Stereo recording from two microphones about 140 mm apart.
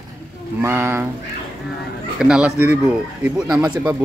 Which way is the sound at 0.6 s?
20° right (ahead or behind).